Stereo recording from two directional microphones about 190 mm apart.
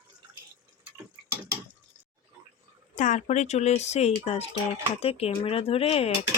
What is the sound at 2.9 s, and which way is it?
Speech, 40° left (ahead or behind).